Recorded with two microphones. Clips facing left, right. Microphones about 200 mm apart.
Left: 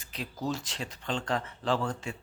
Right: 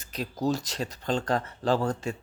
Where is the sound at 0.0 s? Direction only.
40° right (ahead or behind).